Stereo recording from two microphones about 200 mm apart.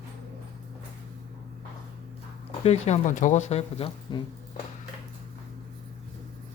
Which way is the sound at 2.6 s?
35° left (ahead or behind).